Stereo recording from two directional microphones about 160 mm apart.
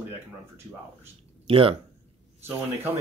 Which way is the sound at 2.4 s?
15° right (ahead or behind).